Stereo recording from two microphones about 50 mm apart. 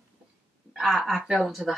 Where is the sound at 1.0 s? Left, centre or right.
Centre.